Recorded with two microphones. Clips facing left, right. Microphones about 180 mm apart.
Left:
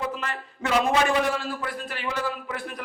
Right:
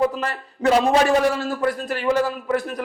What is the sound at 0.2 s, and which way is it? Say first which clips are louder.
A man's voice: right 6 dB; 40° right (ahead or behind).